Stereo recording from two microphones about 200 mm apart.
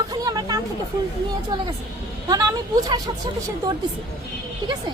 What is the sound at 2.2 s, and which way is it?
Speech, 20° right (ahead or behind).